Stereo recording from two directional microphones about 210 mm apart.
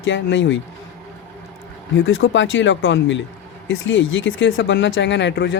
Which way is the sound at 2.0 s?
65° left (ahead or behind).